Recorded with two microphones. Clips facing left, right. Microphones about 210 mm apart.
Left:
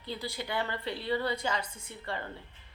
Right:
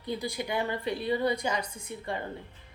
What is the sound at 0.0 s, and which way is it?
Speech, 15° right (ahead or behind).